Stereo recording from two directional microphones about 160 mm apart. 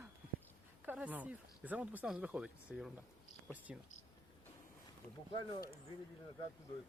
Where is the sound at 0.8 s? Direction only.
10° right (ahead or behind).